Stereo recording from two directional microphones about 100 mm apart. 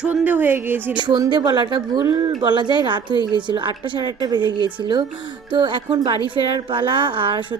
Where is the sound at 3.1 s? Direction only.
50° left (ahead or behind).